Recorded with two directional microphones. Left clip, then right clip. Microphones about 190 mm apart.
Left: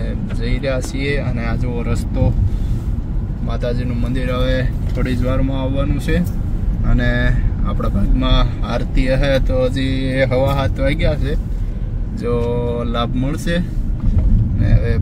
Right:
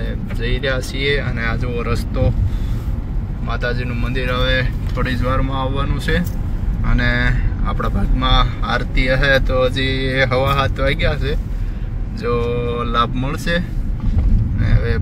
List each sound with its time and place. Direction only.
0.5 s speech: 5° left (ahead or behind)
3.4 s speech: 10° left (ahead or behind)
7.6 s speech: 10° left (ahead or behind)
14.6 s vehicle: 15° left (ahead or behind)